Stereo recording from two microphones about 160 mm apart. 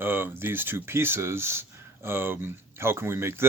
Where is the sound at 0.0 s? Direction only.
15° right (ahead or behind).